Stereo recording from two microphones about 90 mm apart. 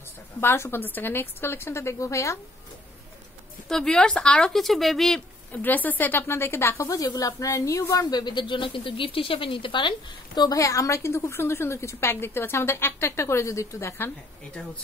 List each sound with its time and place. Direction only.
0.4 s a woman's voice: 25° left (ahead or behind)
3.6 s speech: 5° left (ahead or behind)
5.5 s a woman's voice: 20° left (ahead or behind); by 10.6 s 55° left (ahead or behind)
10.6 s a woman's voice: 35° left (ahead or behind)